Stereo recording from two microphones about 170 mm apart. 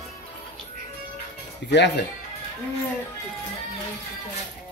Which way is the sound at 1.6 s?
90° left.